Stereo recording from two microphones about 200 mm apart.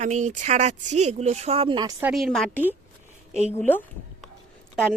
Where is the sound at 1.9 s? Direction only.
5° right (ahead or behind).